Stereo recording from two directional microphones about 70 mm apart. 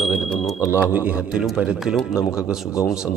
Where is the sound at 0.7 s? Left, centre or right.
Right.